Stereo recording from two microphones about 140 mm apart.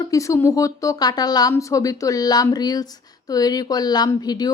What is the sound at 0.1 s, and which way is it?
Speech, 20° left (ahead or behind).